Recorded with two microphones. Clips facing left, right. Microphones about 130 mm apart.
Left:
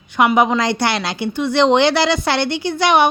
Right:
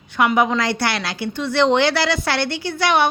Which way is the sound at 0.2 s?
20° left (ahead or behind).